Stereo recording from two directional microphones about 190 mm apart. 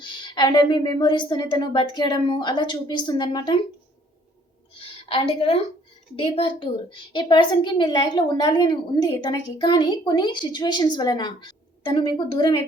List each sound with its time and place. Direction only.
0.0 s a woman's voice: 25° left (ahead or behind)
4.8 s a sound: 30° left (ahead or behind)
6.1 s a woman's voice: 30° left (ahead or behind)